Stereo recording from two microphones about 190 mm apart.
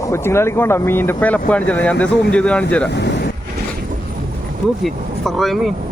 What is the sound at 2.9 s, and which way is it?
Speech, 65° left (ahead or behind).